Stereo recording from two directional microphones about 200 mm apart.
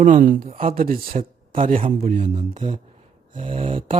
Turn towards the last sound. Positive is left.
turn(degrees=-25)  # may be behind; listen again after turning